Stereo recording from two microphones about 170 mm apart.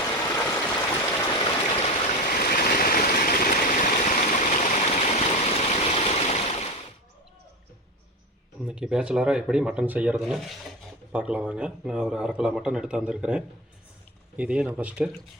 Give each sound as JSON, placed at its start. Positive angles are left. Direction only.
{"t": 0.0, "sound": "stream", "side_deg": 15}
{"t": 1.8, "sound": "stream", "side_deg": 40}
{"t": 8.6, "sound": "speech", "side_deg": -5}